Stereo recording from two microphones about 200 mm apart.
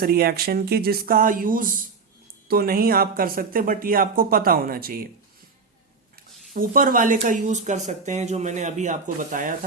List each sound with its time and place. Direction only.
0.0 s speech: 50° right (ahead or behind)
6.5 s speech: 45° right (ahead or behind)